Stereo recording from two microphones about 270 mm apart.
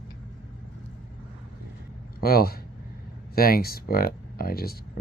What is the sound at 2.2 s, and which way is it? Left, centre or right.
Speech, left.